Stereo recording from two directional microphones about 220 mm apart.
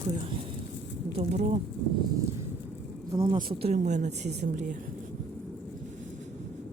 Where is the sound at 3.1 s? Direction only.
20° right (ahead or behind).